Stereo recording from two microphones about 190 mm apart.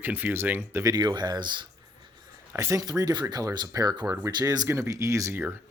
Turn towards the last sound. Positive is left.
turn(degrees=-15)  # may be behind; listen again after turning